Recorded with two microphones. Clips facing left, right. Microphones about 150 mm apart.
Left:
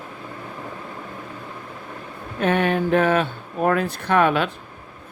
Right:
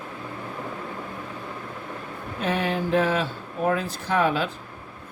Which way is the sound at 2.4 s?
60° left (ahead or behind).